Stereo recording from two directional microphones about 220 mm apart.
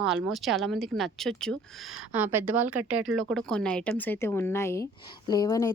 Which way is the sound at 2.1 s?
10° right (ahead or behind).